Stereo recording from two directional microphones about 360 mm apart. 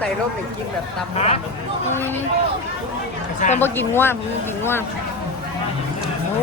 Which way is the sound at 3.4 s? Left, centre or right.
Centre.